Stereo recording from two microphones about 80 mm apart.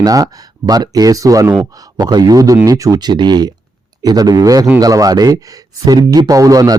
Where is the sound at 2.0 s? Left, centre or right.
Right.